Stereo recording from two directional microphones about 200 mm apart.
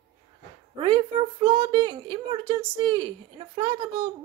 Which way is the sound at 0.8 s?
25° right (ahead or behind).